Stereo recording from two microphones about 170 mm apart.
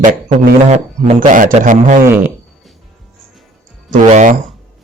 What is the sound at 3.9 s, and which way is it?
Speech, 50° right (ahead or behind).